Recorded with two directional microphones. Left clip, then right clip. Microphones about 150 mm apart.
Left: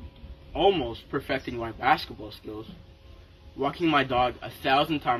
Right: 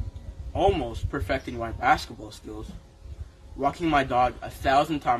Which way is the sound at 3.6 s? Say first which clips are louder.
Right 1 dB; 10° right (ahead or behind).